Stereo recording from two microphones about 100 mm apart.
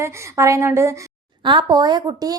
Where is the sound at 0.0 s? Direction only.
30° right (ahead or behind).